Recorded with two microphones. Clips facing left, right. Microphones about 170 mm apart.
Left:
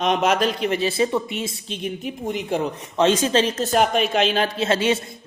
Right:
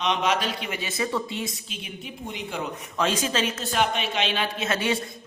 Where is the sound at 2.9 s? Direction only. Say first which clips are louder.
Left 7 dB; 30° left (ahead or behind).